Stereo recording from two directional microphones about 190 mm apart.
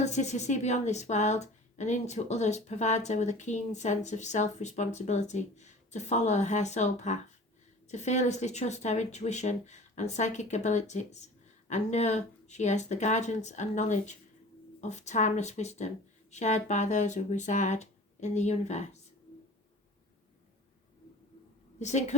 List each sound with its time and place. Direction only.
0.0 s a woman's voice: 35° left (ahead or behind)
21.8 s a woman's voice: 35° left (ahead or behind)